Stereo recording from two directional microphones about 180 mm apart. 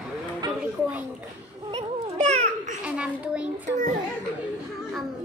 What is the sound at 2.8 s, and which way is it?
Speech, 5° right (ahead or behind).